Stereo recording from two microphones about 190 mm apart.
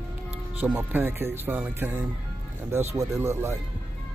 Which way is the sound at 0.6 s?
10° right (ahead or behind).